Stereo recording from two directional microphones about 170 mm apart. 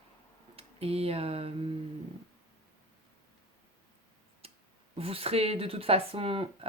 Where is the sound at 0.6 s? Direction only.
35° right (ahead or behind).